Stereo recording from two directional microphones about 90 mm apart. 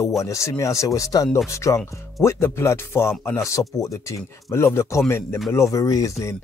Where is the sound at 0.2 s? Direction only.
35° left (ahead or behind).